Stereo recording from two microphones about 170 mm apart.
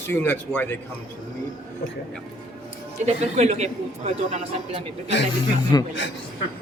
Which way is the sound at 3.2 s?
45° right (ahead or behind).